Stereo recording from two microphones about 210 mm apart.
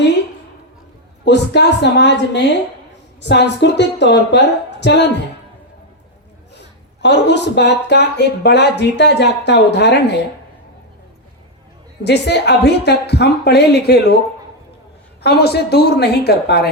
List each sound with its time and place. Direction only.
1.2 s a woman's voice: 55° left (ahead or behind)
7.0 s speech: 55° left (ahead or behind)
12.0 s speech: 50° left (ahead or behind)
15.2 s speech: 50° left (ahead or behind)